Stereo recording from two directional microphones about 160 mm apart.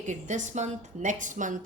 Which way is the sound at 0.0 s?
50° right (ahead or behind).